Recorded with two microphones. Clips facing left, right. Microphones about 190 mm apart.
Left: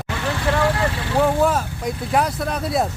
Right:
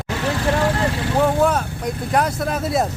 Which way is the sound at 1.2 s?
Centre (ahead or behind).